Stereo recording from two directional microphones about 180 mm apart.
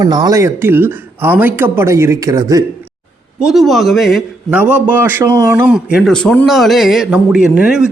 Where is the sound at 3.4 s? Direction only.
Centre (ahead or behind).